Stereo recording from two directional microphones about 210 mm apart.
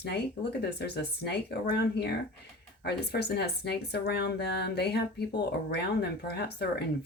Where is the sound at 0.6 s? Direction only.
50° left (ahead or behind).